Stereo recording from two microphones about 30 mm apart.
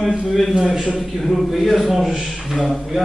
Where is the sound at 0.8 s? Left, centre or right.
Right.